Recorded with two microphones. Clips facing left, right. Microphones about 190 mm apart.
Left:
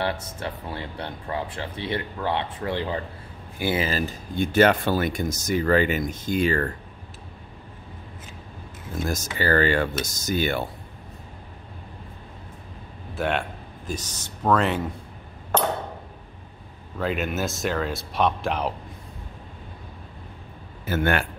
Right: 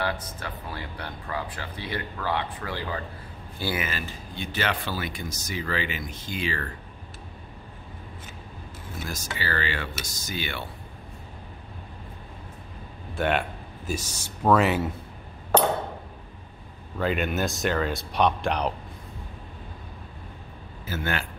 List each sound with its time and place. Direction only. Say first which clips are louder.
0.0 s speech: left 3 dB; 25° left (ahead or behind)
3.8 s speech: left 7 dB; 40° left (ahead or behind)
9.0 s speech: left 8 dB; 45° left (ahead or behind)
13.1 s speech: right 1 dB; centre (ahead or behind)
17.0 s speech: even; centre (ahead or behind)
20.8 s a man's voice: left 7 dB; 60° left (ahead or behind)